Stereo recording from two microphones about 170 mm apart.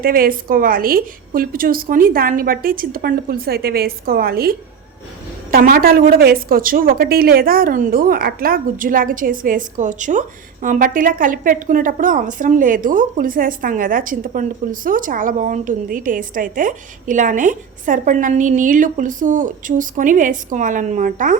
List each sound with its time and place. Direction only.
0.0 s a woman's voice: 55° right (ahead or behind)